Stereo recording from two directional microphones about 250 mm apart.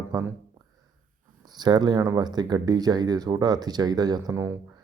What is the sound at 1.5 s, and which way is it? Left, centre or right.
Speech, centre.